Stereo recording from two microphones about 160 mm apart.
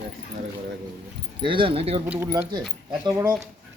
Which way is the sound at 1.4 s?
30° right (ahead or behind).